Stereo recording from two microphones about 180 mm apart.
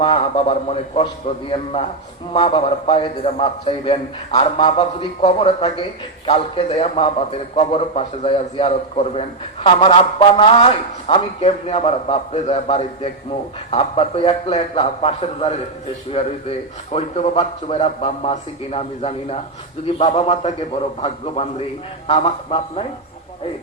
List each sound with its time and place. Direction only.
0.0 s a man's voice: 35° left (ahead or behind)
2.3 s a man's voice: 35° left (ahead or behind)